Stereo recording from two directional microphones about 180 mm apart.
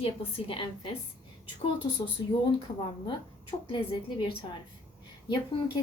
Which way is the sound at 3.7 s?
30° left (ahead or behind).